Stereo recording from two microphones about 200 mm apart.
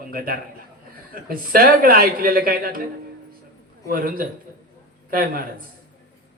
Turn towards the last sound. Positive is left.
turn(degrees=-45)  # may be behind; listen again after turning